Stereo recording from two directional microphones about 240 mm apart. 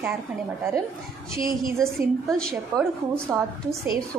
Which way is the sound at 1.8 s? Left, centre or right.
Centre.